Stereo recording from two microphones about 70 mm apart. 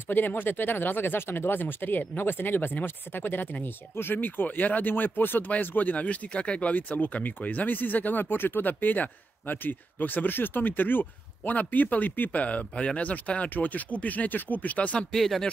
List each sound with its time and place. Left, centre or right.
0.1 s speech: left
15.1 s speech: centre